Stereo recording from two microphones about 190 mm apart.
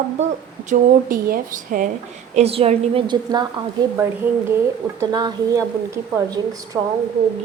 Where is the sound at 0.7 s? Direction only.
45° right (ahead or behind).